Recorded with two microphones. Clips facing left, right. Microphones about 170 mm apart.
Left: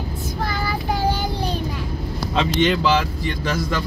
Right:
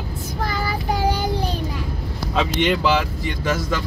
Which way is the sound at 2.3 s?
5° right (ahead or behind).